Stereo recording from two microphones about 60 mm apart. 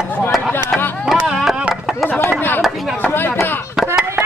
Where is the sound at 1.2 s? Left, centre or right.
Centre.